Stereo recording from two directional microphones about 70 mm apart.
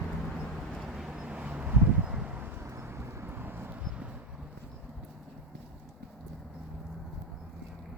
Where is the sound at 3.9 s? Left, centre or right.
Centre.